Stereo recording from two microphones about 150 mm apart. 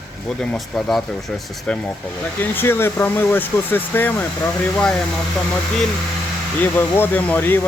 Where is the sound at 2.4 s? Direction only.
15° left (ahead or behind).